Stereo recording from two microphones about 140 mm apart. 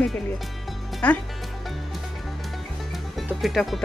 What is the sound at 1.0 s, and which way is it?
Speech, 10° left (ahead or behind).